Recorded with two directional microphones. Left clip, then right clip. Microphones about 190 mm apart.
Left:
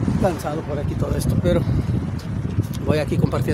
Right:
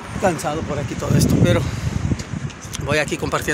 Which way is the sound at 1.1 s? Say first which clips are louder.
Right 4 dB; centre (ahead or behind).